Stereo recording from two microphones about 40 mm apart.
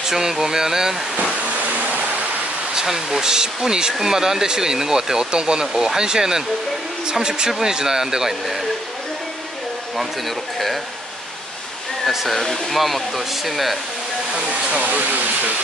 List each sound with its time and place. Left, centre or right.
0.1 s speech: centre
1.6 s a sound: right
2.7 s speech: centre
9.9 s speech: centre
12.1 s speech: centre
12.4 s speech: centre
14.3 s speech: right